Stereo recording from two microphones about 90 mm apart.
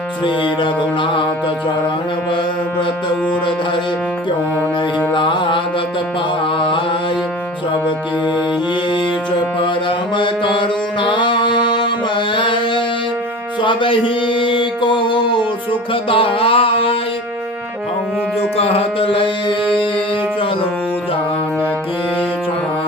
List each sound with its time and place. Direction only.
0.3 s music: 70° left (ahead or behind)
5.1 s music: 65° left (ahead or behind)
6.4 s mantra: 75° left (ahead or behind)
10.2 s music: 70° left (ahead or behind)
15.9 s music: 85° left
18.5 s mantra: 90° left